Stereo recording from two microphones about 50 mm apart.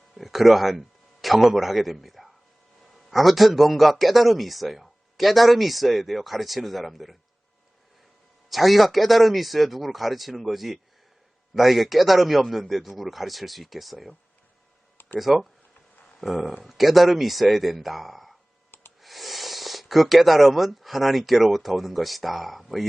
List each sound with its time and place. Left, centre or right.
0.1 s a man's voice: centre
8.4 s a man's voice: centre
15.2 s a man's voice: centre